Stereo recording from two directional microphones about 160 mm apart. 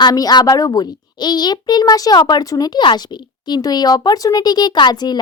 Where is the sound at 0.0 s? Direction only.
25° left (ahead or behind).